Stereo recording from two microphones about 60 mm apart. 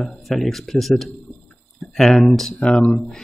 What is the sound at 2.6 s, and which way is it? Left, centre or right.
Speech, centre.